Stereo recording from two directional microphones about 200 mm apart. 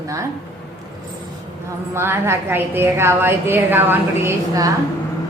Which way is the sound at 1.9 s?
10° right (ahead or behind).